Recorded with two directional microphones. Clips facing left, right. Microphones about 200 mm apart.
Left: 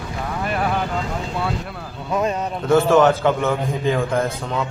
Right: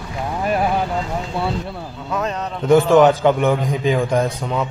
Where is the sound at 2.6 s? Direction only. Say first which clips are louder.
Right 3 dB; 15° right (ahead or behind).